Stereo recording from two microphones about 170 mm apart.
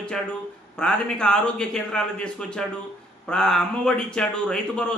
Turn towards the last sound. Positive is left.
turn(degrees=5)  # may be behind; listen again after turning